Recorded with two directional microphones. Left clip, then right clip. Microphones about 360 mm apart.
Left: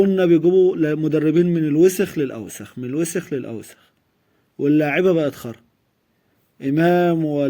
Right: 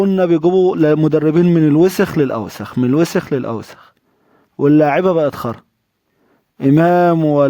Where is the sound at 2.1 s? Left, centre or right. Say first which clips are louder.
Right 8 dB; right.